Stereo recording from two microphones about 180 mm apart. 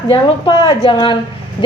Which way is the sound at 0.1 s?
25° left (ahead or behind).